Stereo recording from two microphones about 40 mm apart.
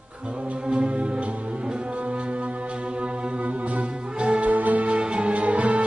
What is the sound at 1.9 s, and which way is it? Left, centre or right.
Music, right.